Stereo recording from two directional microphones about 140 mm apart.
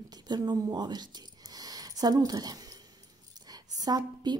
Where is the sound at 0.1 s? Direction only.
30° right (ahead or behind).